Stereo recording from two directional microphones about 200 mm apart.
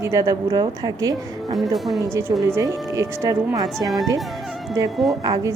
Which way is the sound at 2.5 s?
15° right (ahead or behind).